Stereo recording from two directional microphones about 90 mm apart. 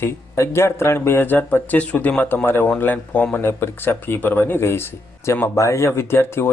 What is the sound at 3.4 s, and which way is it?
Speech, 25° left (ahead or behind).